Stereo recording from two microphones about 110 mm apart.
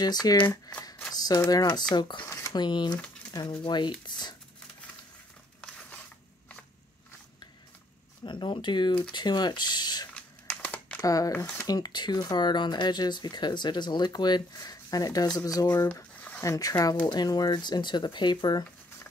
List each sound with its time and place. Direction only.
0.0 s speech: 35° left (ahead or behind)
1.1 s a sound: 35° left (ahead or behind)
1.5 s speech: 35° left (ahead or behind)
2.2 s speech: 30° left (ahead or behind)
2.6 s speech: 45° left (ahead or behind)
5.6 s a sound: 10° left (ahead or behind)
8.2 s speech: 45° left (ahead or behind)
10.1 s crumpling: 15° left (ahead or behind)
11.0 s speech: 35° left (ahead or behind)
11.3 s speech: 15° left (ahead or behind)
11.6 s speech: 35° left (ahead or behind)
15.9 s squish: 20° left (ahead or behind)
16.4 s speech: 30° left (ahead or behind)